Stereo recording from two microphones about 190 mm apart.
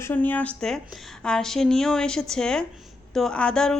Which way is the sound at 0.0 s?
10° left (ahead or behind).